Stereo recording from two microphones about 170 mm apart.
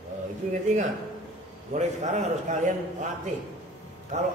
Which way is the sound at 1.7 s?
40° right (ahead or behind).